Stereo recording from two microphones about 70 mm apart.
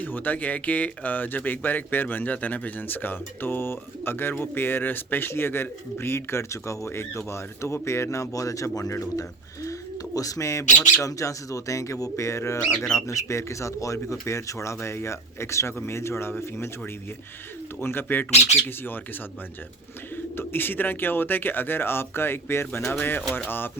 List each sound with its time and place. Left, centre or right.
0.0 s speech: left
20.1 s speech: left